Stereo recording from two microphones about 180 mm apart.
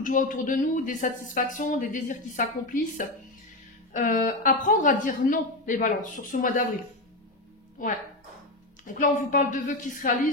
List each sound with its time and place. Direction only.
0.0 s speech: 45° left (ahead or behind)
7.8 s speech: 50° left (ahead or behind)